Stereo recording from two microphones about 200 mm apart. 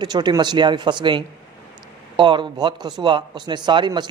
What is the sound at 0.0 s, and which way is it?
Speech, 20° right (ahead or behind).